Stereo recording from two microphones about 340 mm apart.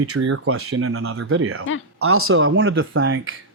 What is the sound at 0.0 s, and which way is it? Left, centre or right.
Speech, right.